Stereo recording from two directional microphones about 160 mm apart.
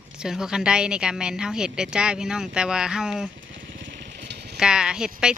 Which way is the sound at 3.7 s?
90° right.